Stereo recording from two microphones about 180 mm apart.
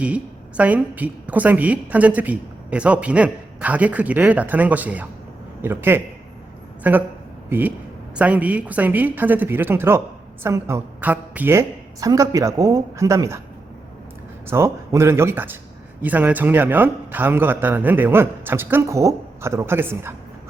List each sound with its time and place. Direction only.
0.0 s a woman's voice: 5° right (ahead or behind)
14.4 s a woman's voice: 15° right (ahead or behind)